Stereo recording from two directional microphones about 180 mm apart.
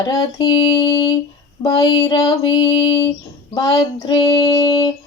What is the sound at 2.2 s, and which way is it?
Female singing, 25° left (ahead or behind).